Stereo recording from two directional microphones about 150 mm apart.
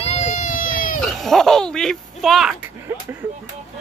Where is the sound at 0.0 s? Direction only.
45° left (ahead or behind); by 0.9 s 65° left (ahead or behind).